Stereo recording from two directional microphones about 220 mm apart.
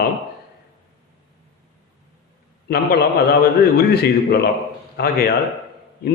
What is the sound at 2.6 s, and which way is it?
A man's voice, 45° left (ahead or behind).